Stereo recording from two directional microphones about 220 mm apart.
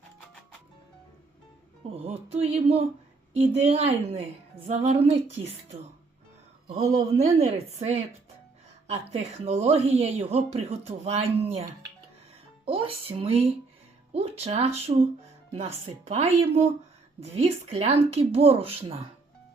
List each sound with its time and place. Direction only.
1.8 s speech: 25° right (ahead or behind)
6.7 s speech: 30° right (ahead or behind)
9.4 s speech: 30° right (ahead or behind)